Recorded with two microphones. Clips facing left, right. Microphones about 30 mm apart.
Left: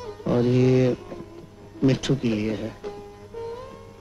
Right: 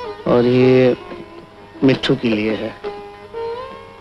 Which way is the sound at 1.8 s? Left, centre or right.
Right.